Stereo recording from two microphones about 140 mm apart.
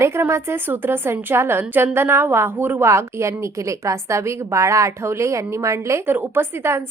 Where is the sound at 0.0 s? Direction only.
20° right (ahead or behind).